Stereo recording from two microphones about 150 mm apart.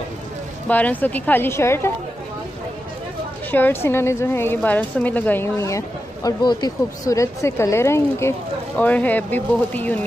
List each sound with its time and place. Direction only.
0.7 s a woman's voice: 10° left (ahead or behind)
3.5 s a woman's voice: 15° left (ahead or behind)